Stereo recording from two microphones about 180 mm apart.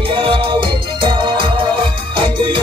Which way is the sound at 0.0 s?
30° right (ahead or behind).